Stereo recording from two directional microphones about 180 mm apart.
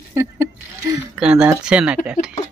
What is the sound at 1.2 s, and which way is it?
Speech, 5° right (ahead or behind).